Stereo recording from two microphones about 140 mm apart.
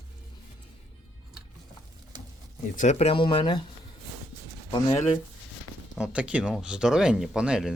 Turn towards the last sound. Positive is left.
turn(degrees=-5)  # may be behind; listen again after turning